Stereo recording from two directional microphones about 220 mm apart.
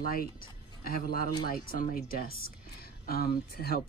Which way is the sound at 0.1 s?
40° left (ahead or behind).